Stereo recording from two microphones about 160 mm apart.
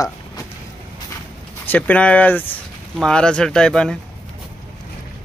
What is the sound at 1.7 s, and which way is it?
Speech, 10° left (ahead or behind).